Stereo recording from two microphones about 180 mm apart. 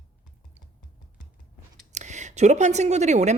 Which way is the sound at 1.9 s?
40° right (ahead or behind).